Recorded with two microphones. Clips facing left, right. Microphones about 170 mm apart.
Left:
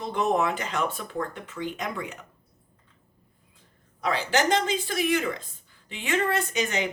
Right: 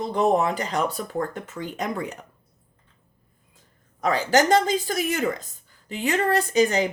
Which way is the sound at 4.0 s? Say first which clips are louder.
Right 5 dB; 45° right (ahead or behind).